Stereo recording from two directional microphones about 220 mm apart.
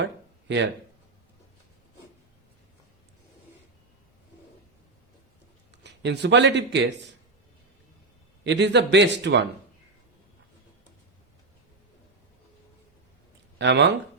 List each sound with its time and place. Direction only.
0.0 s a sound: 55° right (ahead or behind)
5.7 s speech: 50° right (ahead or behind)
8.4 s a man's voice: 50° right (ahead or behind)
13.6 s a man's voice: 50° right (ahead or behind)